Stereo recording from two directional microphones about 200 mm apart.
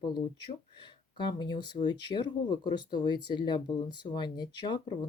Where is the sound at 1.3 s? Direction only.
20° left (ahead or behind).